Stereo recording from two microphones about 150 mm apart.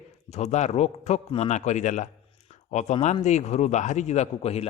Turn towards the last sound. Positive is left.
turn(degrees=45)  # may be behind; listen again after turning